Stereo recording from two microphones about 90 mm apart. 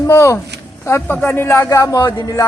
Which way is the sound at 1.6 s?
40° left (ahead or behind).